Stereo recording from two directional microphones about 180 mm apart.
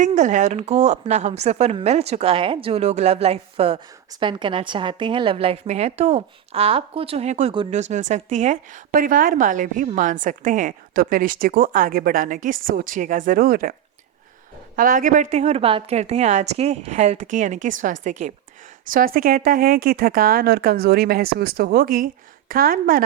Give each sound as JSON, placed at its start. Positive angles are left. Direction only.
{"t": 0.0, "sound": "a woman's voice", "side_deg": -40}
{"t": 7.8, "sound": "a woman's voice", "side_deg": -40}
{"t": 14.8, "sound": "a woman's voice", "side_deg": -50}
{"t": 18.9, "sound": "speech", "side_deg": -55}